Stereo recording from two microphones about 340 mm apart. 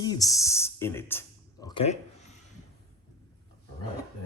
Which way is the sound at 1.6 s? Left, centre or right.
Centre.